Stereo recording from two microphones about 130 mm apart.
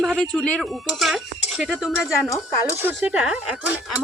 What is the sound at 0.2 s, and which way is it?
Speech, 5° left (ahead or behind).